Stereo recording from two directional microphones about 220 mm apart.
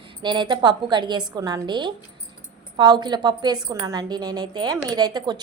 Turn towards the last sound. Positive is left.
turn(degrees=-20)  # may be behind; listen again after turning